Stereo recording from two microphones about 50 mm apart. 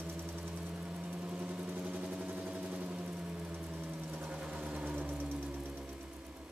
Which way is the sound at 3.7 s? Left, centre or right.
Right.